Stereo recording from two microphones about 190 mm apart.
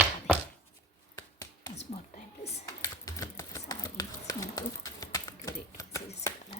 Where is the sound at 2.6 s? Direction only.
15° left (ahead or behind).